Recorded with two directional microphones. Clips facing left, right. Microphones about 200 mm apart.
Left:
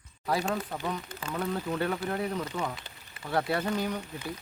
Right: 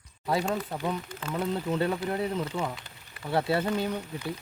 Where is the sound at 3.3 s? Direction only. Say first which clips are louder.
Right 2 dB; 25° right (ahead or behind).